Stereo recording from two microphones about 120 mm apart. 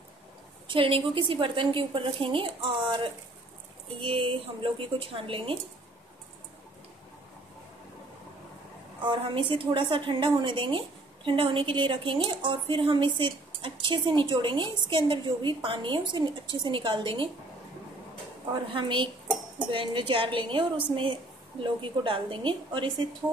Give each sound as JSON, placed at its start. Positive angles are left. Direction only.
{"t": 0.7, "sound": "a woman's voice", "side_deg": -50}
{"t": 9.0, "sound": "a woman's voice", "side_deg": -40}
{"t": 18.5, "sound": "a woman's voice", "side_deg": -45}